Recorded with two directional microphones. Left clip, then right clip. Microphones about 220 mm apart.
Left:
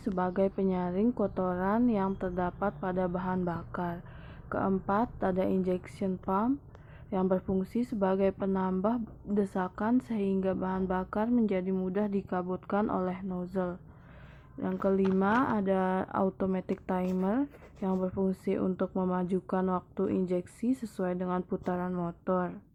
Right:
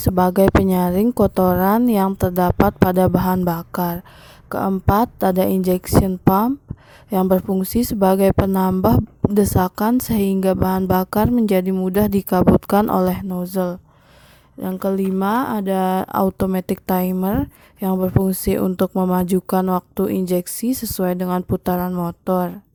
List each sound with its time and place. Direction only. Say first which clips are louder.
0.0 s speech: right 14 dB; 50° right (ahead or behind)